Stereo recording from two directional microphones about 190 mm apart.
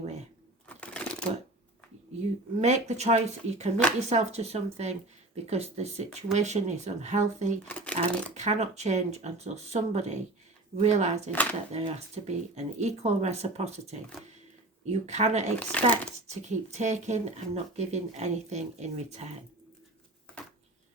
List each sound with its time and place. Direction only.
0.8 s shuffling cards: 5° left (ahead or behind)
2.6 s speech: 35° right (ahead or behind)
7.7 s shuffling cards: 5° left (ahead or behind)
7.9 s speech: 35° right (ahead or behind)
15.5 s speech: 10° left (ahead or behind)
16.2 s speech: 40° right (ahead or behind)